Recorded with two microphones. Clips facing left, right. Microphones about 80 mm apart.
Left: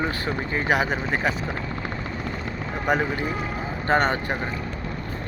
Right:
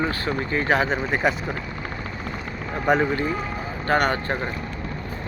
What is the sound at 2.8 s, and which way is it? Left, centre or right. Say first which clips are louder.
Speech: right 3 dB; centre.